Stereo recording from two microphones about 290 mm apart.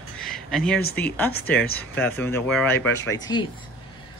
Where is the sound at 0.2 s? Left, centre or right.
Centre.